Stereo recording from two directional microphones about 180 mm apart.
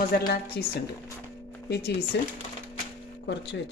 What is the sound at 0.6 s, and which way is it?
A man's voice, 70° left (ahead or behind).